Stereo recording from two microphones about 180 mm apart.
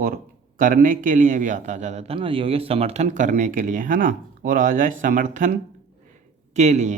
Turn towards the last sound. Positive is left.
turn(degrees=-40)  # may be behind; listen again after turning